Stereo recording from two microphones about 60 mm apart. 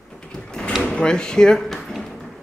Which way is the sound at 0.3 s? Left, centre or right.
Centre.